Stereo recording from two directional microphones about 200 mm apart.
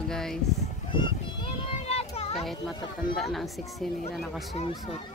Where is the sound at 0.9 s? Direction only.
25° left (ahead or behind).